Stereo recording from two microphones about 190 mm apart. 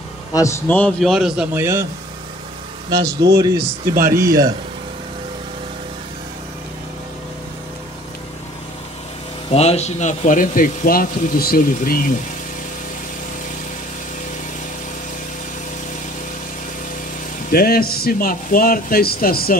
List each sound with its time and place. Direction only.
0.3 s a man's voice: 15° left (ahead or behind); by 1.9 s 15° right (ahead or behind)
2.9 s speech: 20° right (ahead or behind)
3.5 s speech: 50° right (ahead or behind)
4.1 s speech: 15° right (ahead or behind)
9.5 s speech: 35° left (ahead or behind); by 12.1 s 50° left (ahead or behind)
17.5 s speech: 55° left (ahead or behind)